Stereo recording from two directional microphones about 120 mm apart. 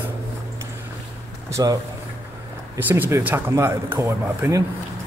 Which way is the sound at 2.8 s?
15° right (ahead or behind).